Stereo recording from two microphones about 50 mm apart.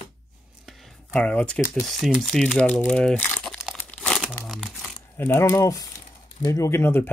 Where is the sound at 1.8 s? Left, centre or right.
Centre.